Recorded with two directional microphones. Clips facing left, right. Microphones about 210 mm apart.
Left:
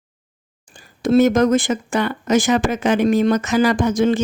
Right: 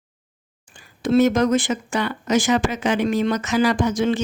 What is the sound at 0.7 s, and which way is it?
Speech, 40° left (ahead or behind).